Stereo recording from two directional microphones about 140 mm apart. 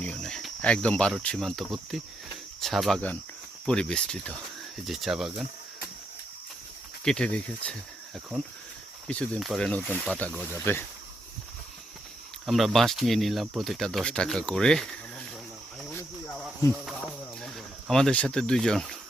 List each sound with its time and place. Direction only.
0.0 s speech: 5° left (ahead or behind)
7.0 s speech: 5° left (ahead or behind)
9.0 s speech: 10° left (ahead or behind)
12.5 s speech: centre (ahead or behind)
15.9 s cricket: 15° left (ahead or behind)
16.7 s a sound: centre (ahead or behind)